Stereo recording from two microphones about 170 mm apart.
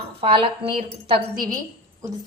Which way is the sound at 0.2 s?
30° right (ahead or behind).